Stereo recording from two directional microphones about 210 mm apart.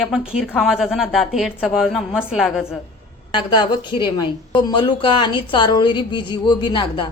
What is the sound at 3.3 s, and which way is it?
A woman's voice, 25° left (ahead or behind).